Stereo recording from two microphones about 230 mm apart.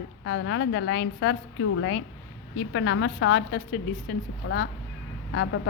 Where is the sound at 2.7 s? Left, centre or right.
Left.